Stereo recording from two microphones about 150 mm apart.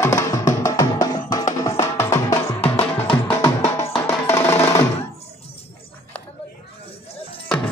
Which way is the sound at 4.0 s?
15° left (ahead or behind).